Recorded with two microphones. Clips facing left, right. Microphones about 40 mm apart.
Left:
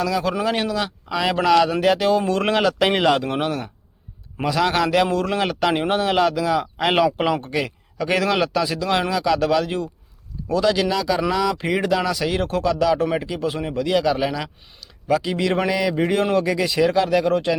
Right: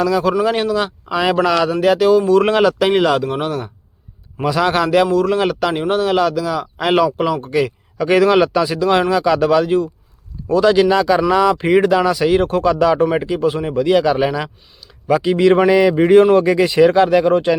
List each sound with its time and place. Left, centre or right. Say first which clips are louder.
0.0 s speech: right 6 dB; centre
0.9 s speech: right 5 dB; centre
1.4 s speech: left 2 dB; centre
4.4 s a man's voice: right 4 dB; centre
7.2 s a man's voice: right 3 dB; centre
7.4 s speech: right 7 dB; centre; by 17.6 s right